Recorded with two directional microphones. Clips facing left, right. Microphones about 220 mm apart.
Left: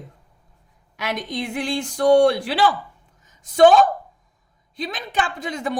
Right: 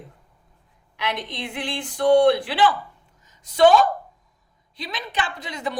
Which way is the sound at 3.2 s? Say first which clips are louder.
Left 2 dB; 50° left (ahead or behind).